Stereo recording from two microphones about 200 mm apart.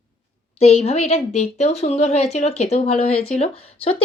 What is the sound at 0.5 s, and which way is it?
Speech, 30° left (ahead or behind).